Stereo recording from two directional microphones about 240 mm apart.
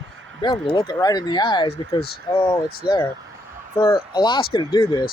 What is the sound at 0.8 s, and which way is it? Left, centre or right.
Speech, centre.